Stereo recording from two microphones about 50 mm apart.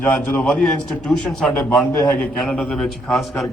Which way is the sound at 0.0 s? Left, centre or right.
Left.